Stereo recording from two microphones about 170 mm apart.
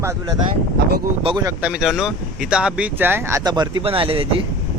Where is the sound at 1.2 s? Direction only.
30° right (ahead or behind).